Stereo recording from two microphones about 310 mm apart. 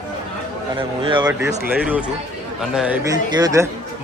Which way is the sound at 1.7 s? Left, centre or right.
Centre.